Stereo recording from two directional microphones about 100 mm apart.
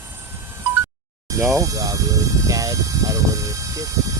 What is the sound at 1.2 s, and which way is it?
Speech, 35° right (ahead or behind).